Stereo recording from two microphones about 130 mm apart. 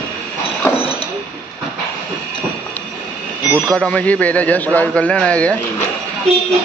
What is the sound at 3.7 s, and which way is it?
A man's voice, 10° left (ahead or behind).